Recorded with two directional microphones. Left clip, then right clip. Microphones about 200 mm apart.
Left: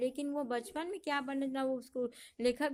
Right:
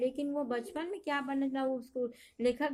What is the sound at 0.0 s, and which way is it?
A woman's voice, 40° left (ahead or behind).